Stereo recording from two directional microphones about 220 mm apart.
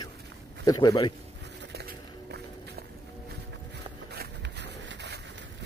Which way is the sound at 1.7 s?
45° right (ahead or behind).